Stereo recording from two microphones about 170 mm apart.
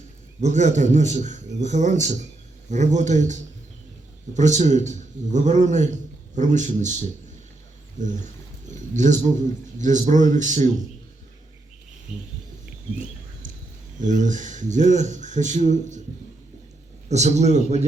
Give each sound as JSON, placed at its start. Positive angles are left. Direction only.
{"t": 0.4, "sound": "a man's voice", "side_deg": -45}
{"t": 4.4, "sound": "a man's voice", "side_deg": -45}
{"t": 7.9, "sound": "a man's voice", "side_deg": -45}
{"t": 14.0, "sound": "a man's voice", "side_deg": -45}
{"t": 17.1, "sound": "a man's voice", "side_deg": -40}